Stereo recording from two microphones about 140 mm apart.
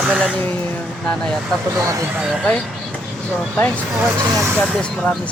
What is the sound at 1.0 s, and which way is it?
Speech, 5° left (ahead or behind).